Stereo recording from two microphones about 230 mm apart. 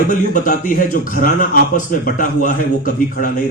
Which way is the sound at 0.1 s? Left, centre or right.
Left.